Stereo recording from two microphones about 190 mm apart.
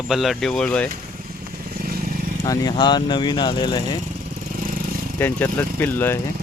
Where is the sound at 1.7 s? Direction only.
50° right (ahead or behind).